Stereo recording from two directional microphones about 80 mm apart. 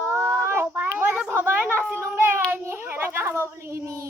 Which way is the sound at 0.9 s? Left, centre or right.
Centre.